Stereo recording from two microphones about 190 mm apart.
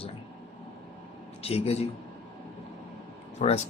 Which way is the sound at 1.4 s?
30° left (ahead or behind).